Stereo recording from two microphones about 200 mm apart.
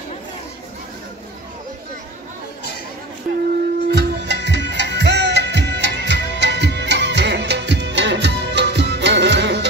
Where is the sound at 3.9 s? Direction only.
60° right (ahead or behind).